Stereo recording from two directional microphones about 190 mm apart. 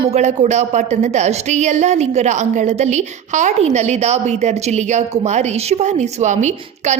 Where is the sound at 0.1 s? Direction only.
35° right (ahead or behind).